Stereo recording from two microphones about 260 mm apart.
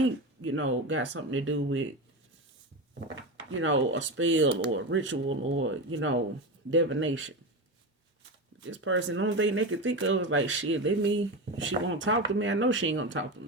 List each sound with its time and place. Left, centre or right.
0.0 s speech: right
3.5 s speech: right
8.6 s speech: right